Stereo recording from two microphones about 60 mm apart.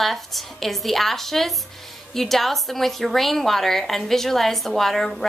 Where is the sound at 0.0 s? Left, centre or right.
Centre.